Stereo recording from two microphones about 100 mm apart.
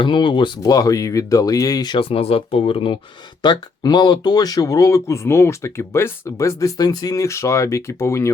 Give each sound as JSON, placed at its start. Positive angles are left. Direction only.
{"t": 0.0, "sound": "speech", "side_deg": 55}
{"t": 0.6, "sound": "speech", "side_deg": 35}
{"t": 2.0, "sound": "speech", "side_deg": 75}
{"t": 3.4, "sound": "speech", "side_deg": 45}